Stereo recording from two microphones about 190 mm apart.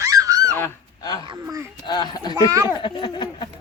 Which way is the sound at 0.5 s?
15° left (ahead or behind).